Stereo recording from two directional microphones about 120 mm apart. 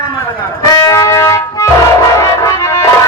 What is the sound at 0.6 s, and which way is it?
Music, 30° left (ahead or behind).